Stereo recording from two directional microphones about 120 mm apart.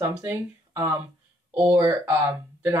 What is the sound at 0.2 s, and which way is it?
Speech, 25° right (ahead or behind).